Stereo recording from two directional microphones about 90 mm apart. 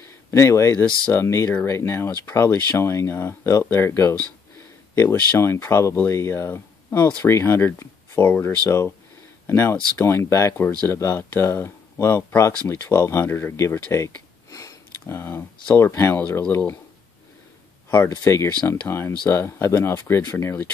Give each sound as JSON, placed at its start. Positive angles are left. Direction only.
{"t": 0.0, "sound": "speech", "side_deg": 30}
{"t": 13.9, "sound": "a sound", "side_deg": 35}
{"t": 15.7, "sound": "speech", "side_deg": 30}
{"t": 18.0, "sound": "speech", "side_deg": 30}